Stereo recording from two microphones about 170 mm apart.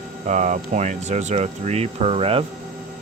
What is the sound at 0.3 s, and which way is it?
Speech, 45° right (ahead or behind).